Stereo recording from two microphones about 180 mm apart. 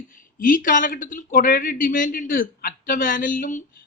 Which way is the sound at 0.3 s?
50° left (ahead or behind).